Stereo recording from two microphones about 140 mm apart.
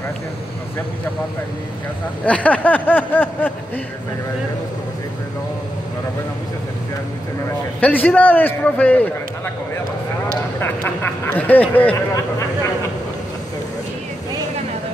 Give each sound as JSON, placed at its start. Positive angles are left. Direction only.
{"t": 2.2, "sound": "speech", "side_deg": 10}
{"t": 7.8, "sound": "speech", "side_deg": 10}
{"t": 10.6, "sound": "speech", "side_deg": 15}